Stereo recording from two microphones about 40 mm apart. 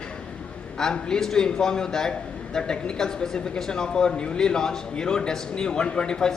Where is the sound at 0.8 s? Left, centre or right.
Centre.